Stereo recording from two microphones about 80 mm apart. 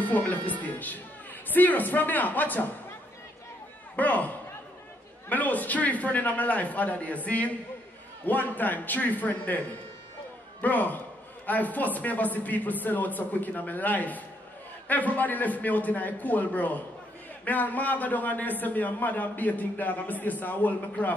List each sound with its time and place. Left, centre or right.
0.0 s a man's voice: left
3.9 s speech: left
5.3 s a man's voice: left